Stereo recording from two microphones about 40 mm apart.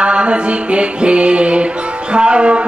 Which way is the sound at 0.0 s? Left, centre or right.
Right.